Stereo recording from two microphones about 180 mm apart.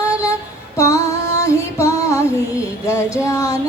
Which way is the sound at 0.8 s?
15° left (ahead or behind).